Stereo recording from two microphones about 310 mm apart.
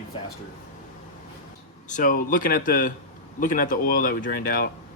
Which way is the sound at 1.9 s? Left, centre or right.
Left.